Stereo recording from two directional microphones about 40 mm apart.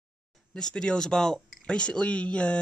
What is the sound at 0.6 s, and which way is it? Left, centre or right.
Speech, centre.